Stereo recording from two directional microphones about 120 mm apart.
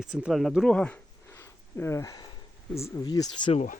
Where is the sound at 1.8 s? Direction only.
25° left (ahead or behind).